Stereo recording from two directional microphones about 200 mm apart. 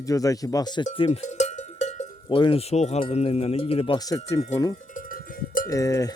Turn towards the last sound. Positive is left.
turn(degrees=15)  # may be behind; listen again after turning